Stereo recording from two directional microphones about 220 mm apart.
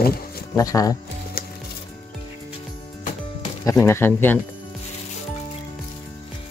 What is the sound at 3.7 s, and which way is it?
Speech, 10° left (ahead or behind).